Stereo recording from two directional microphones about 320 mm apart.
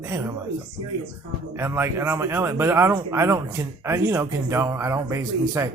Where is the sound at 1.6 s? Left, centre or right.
Centre.